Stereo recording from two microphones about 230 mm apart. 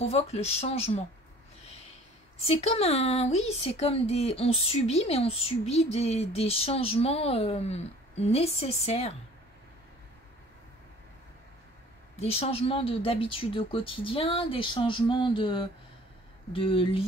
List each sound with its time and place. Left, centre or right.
0.0 s speech: left
2.4 s speech: left
12.2 s speech: left